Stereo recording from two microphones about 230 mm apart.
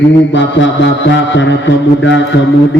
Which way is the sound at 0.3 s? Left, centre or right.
Left.